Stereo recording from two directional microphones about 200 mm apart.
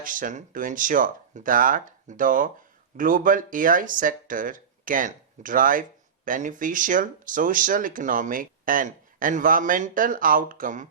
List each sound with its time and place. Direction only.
0.0 s speech: 40° right (ahead or behind)